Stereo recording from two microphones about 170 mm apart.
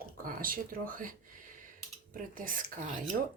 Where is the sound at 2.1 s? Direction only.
50° right (ahead or behind).